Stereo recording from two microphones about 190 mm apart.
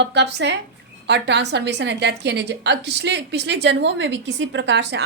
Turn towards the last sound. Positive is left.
turn(degrees=-70)  # may be behind; listen again after turning